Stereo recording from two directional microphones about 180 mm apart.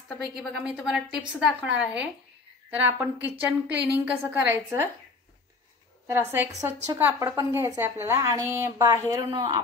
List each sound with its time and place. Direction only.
0.2 s a woman's voice: 5° right (ahead or behind)
6.0 s a woman's voice: 10° right (ahead or behind)